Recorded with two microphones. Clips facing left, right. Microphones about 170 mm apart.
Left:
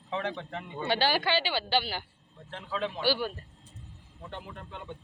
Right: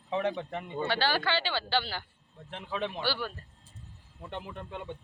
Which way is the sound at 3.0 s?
15° left (ahead or behind).